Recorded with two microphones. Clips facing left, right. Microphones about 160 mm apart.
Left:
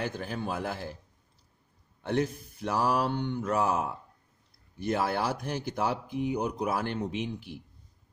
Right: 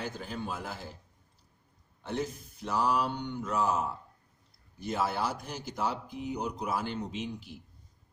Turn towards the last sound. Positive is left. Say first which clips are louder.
# left 4 dB
turn(degrees=60)  # may be behind; listen again after turning